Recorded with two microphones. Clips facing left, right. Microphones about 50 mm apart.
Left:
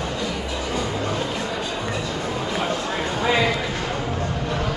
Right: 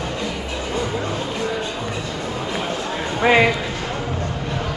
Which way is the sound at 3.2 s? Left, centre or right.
Right.